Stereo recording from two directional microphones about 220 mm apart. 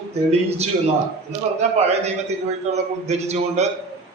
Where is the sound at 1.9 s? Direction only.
30° right (ahead or behind).